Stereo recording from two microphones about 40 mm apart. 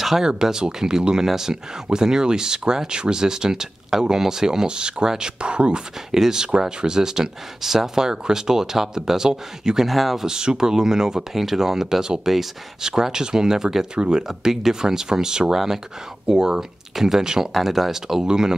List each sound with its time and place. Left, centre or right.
0.2 s speech: centre
6.1 s speech: centre
9.8 s speech: centre
10.2 s speech: centre
12.9 s speech: centre
13.9 s speech: right
14.2 s speech: centre
17.6 s speech: centre